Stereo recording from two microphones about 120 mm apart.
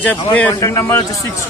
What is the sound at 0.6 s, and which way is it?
Speech, 25° left (ahead or behind).